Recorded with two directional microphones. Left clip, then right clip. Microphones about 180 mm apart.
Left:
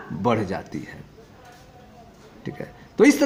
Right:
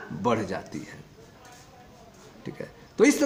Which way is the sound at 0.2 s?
25° left (ahead or behind).